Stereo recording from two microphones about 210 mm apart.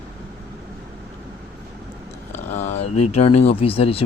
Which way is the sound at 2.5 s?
35° left (ahead or behind).